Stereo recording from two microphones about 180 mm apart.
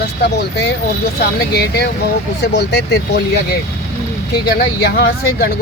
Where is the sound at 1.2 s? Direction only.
65° left (ahead or behind).